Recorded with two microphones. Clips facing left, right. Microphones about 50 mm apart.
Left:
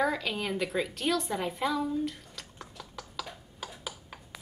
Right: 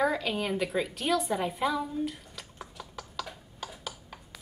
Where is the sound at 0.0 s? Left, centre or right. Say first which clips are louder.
Right 1 dB; centre.